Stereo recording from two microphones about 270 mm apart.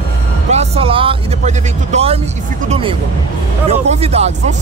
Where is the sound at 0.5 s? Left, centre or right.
Right.